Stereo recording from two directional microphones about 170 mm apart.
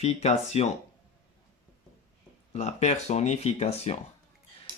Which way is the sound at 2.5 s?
40° left (ahead or behind).